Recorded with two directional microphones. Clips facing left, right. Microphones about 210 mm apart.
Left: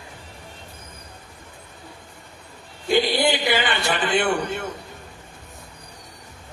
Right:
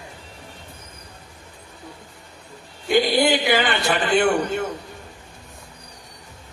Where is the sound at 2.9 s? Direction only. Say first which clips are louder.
Right 2 dB; 45° right (ahead or behind).